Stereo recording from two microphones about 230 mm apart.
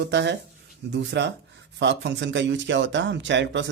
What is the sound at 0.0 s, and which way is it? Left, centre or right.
Speech, right.